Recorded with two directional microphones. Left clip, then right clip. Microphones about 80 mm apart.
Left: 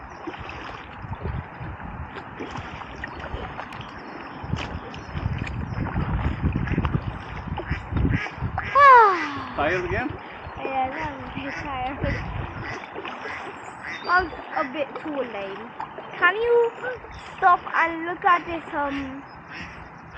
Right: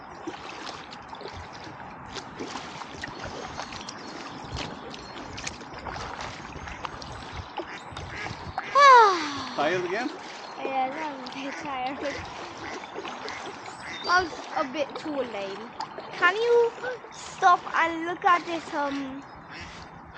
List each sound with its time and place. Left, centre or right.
5.9 s boat: right
7.7 s quack: centre
8.7 s a sound: right
11.7 s speech: right
13.0 s boat: right
14.1 s speech: right